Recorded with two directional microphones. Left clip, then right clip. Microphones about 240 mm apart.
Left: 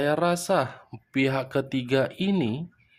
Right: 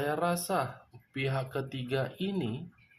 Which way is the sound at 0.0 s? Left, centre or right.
Left.